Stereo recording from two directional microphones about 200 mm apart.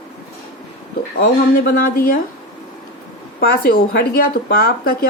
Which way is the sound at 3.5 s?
50° left (ahead or behind).